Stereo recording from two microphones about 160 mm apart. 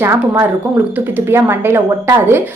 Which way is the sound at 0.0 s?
15° right (ahead or behind).